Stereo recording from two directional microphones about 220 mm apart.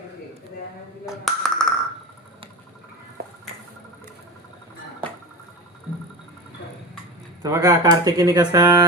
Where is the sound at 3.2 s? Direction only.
45° right (ahead or behind).